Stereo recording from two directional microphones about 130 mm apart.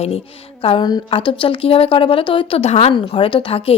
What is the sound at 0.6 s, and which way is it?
A woman's voice, 40° left (ahead or behind).